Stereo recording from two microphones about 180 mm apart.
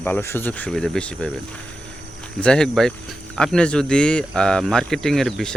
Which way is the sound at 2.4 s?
5° left (ahead or behind).